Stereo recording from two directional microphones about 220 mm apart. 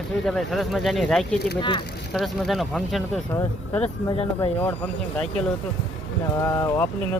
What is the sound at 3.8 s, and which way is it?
Speech, 25° left (ahead or behind).